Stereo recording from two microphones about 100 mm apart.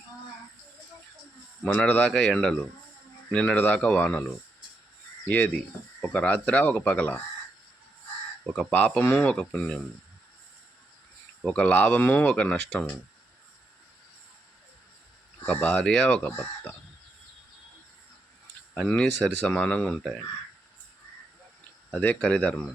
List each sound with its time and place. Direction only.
1.6 s speech: 10° left (ahead or behind)
6.0 s speech: 15° left (ahead or behind)
8.5 s speech: 10° left (ahead or behind)
11.4 s speech: 10° left (ahead or behind)
15.4 s speech: 10° left (ahead or behind)
18.7 s speech: 10° left (ahead or behind)
21.9 s speech: 10° left (ahead or behind)